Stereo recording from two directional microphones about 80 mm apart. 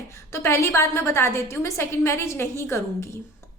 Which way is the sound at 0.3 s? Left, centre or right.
Left.